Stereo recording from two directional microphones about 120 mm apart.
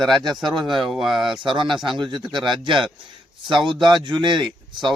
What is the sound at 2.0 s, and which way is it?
Speech, 40° right (ahead or behind).